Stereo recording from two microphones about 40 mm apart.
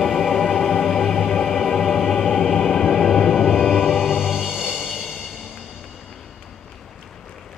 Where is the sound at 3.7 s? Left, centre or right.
Left.